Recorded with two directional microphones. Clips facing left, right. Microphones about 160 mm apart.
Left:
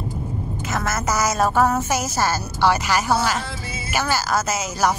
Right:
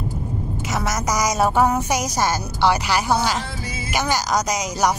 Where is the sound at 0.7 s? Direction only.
15° right (ahead or behind).